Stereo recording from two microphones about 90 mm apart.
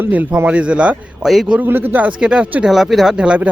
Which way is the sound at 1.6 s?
20° right (ahead or behind).